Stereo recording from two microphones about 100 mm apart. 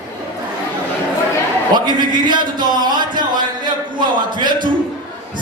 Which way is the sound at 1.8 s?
50° right (ahead or behind).